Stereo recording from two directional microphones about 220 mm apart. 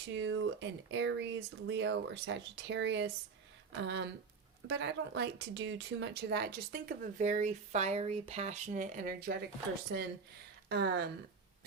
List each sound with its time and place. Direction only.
0.1 s speech: 55° right (ahead or behind)
10.7 s speech: 45° right (ahead or behind)